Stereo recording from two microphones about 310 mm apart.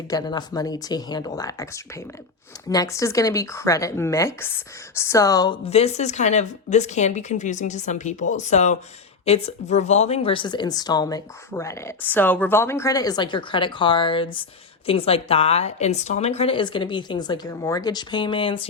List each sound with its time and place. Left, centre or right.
0.1 s speech: centre